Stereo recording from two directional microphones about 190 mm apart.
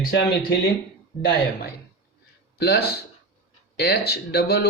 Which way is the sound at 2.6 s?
55° left (ahead or behind).